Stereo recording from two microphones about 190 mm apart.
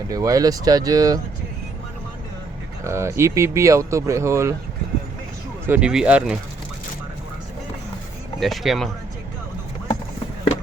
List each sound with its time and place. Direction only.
0.1 s speech: 20° right (ahead or behind)
2.8 s speech: 15° right (ahead or behind)
5.6 s speech: 5° right (ahead or behind)
8.4 s speech: centre (ahead or behind)